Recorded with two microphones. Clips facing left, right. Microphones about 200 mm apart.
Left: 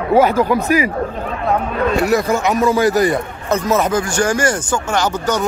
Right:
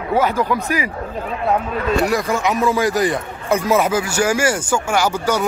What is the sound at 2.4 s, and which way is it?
A man's voice, centre (ahead or behind).